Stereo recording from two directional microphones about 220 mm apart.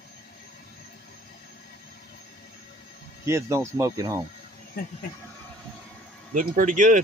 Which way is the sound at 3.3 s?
15° right (ahead or behind).